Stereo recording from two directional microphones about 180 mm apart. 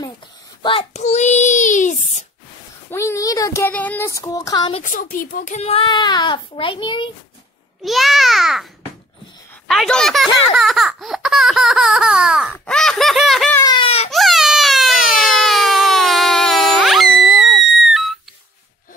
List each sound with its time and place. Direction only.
0.6 s a child's voice: 30° left (ahead or behind)
2.9 s speech: 15° left (ahead or behind)
4.8 s a child's voice: 50° left (ahead or behind); by 7.1 s 25° left (ahead or behind)
7.8 s a child's voice: centre (ahead or behind)
9.7 s a child's voice: 5° left (ahead or behind)
10.5 s baby laughter: centre (ahead or behind)
13.7 s baby cry: 30° left (ahead or behind)
14.1 s a sound: centre (ahead or behind)